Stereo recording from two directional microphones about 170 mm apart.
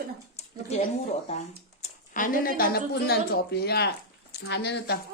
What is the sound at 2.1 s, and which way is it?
A woman's voice, 50° left (ahead or behind).